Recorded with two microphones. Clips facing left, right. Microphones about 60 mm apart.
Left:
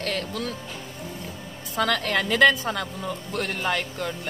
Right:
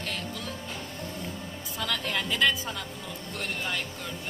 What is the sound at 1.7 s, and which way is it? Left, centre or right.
Speech, left.